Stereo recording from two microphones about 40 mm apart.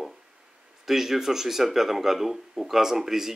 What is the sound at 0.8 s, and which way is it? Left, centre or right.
Speech, centre.